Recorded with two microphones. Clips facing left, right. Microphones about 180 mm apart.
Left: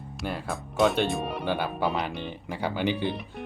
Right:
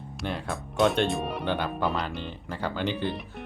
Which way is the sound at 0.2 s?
Centre (ahead or behind).